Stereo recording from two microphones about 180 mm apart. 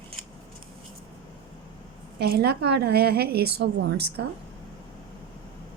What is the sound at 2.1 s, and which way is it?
A woman's voice, 60° right (ahead or behind).